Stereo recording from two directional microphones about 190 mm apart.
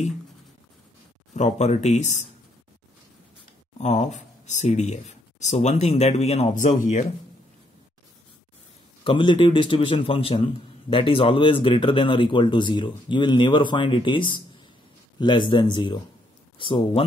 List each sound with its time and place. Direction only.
1.3 s speech: 35° left (ahead or behind)
3.7 s speech: 35° left (ahead or behind)
9.0 s a man's voice: 25° left (ahead or behind)